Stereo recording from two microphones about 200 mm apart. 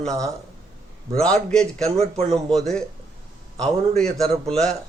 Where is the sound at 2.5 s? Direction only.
Centre (ahead or behind).